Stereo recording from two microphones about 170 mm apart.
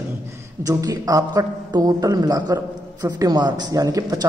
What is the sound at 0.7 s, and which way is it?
A man's voice, 20° right (ahead or behind).